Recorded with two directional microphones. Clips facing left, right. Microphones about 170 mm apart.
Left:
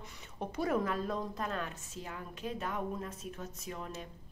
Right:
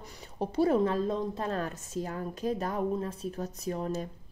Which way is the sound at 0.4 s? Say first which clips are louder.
Right 7 dB; 30° right (ahead or behind).